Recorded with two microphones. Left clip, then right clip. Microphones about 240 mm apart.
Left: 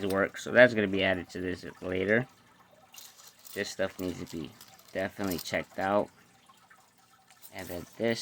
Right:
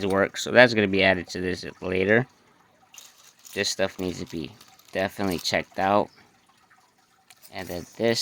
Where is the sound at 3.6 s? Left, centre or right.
Right.